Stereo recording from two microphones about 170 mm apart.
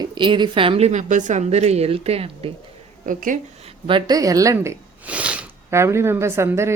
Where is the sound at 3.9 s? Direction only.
25° right (ahead or behind).